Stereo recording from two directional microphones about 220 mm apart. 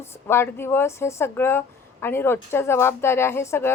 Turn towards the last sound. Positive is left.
turn(degrees=10)  # may be behind; listen again after turning